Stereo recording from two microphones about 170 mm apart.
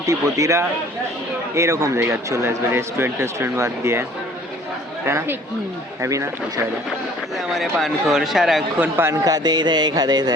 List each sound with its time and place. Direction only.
0.0 s a man's voice: 20° right (ahead or behind)
5.0 s speech: 15° right (ahead or behind)
7.4 s speech: centre (ahead or behind)
9.0 s a man's voice: 15° right (ahead or behind)